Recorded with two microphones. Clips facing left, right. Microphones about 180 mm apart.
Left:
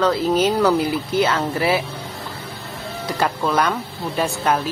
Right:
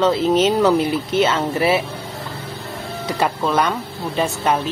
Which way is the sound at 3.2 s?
5° right (ahead or behind).